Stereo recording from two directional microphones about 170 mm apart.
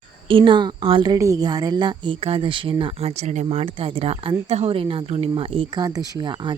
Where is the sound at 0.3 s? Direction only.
30° right (ahead or behind).